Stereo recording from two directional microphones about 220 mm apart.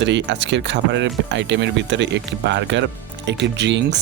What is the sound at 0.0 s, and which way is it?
Speech, 55° right (ahead or behind).